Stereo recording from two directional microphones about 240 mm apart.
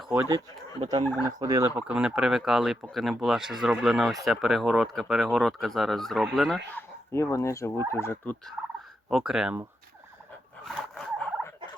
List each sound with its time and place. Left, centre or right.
0.1 s speech: centre
6.7 s speech: centre
7.9 s fowl: centre
9.0 s speech: centre
10.7 s turkey: centre